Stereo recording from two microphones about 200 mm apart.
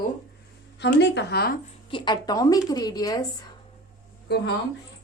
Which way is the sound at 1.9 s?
25° left (ahead or behind).